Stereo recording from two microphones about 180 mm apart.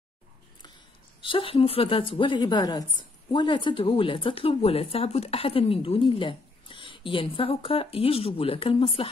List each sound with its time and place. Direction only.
1.2 s speech: 30° left (ahead or behind)